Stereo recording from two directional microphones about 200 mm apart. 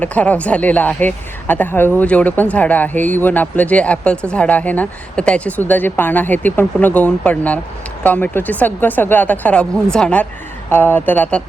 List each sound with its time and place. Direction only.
0.0 s speech: 5° left (ahead or behind)